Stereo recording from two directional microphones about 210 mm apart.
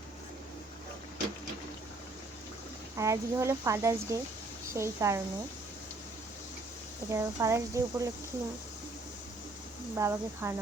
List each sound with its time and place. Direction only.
3.0 s speech: 15° right (ahead or behind)
7.1 s speech: 15° right (ahead or behind)
9.9 s speech: 10° right (ahead or behind)